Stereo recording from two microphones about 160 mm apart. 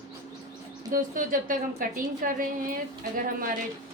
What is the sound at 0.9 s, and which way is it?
A woman's voice, 60° right (ahead or behind).